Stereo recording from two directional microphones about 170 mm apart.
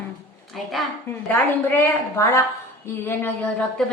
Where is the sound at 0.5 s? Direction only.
Centre (ahead or behind).